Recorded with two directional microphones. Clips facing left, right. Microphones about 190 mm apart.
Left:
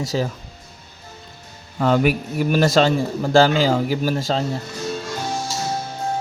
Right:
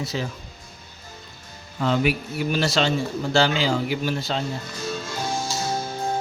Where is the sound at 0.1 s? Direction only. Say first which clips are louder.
Left 7 dB; 40° left (ahead or behind).